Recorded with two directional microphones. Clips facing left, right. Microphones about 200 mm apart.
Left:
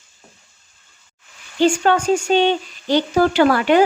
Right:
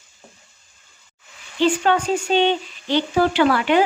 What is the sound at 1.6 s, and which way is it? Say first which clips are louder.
Speech: left 3 dB; 45° left (ahead or behind).